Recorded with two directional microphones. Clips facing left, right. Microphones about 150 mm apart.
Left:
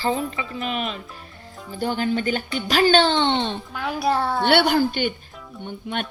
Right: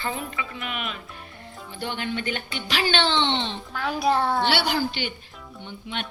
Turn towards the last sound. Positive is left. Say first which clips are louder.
# left 5 dB
turn(degrees=50)  # may be behind; listen again after turning